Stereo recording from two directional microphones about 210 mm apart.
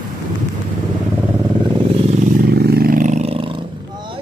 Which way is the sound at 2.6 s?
45° right (ahead or behind).